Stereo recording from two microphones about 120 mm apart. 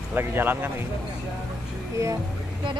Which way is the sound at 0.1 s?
15° right (ahead or behind).